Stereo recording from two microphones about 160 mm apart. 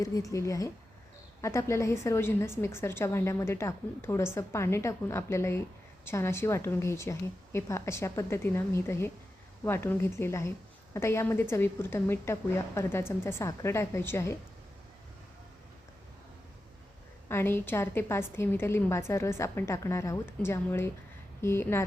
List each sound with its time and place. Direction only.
0.0 s a woman's voice: 20° left (ahead or behind)
17.2 s a woman's voice: 15° left (ahead or behind)